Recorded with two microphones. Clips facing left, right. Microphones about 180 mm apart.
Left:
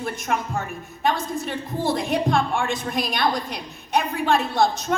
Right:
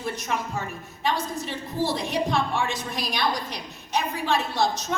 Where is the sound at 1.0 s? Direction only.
55° left (ahead or behind).